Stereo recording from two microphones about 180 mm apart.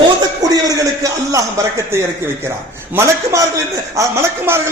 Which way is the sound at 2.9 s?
15° right (ahead or behind).